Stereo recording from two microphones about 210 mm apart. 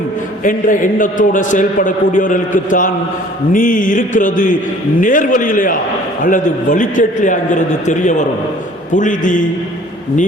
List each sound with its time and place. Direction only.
0.4 s a man's voice: 40° left (ahead or behind)